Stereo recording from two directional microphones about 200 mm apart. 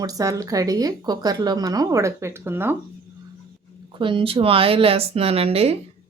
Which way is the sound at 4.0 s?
25° right (ahead or behind).